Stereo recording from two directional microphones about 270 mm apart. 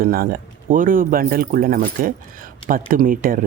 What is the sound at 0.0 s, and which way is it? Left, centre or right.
Speech, right.